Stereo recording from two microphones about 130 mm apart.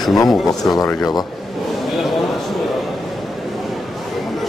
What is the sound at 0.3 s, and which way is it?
Speech, 30° left (ahead or behind).